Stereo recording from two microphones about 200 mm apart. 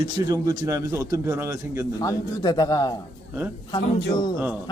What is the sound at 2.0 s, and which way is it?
A man's voice, 15° left (ahead or behind).